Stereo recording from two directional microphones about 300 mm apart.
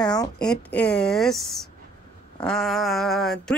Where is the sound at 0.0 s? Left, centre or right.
Centre.